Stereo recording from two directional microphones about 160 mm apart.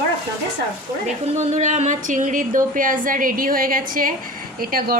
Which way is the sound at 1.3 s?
45° right (ahead or behind).